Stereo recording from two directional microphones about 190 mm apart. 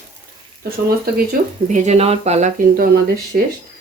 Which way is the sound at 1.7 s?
35° right (ahead or behind).